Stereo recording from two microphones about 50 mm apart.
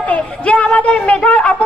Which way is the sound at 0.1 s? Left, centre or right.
Left.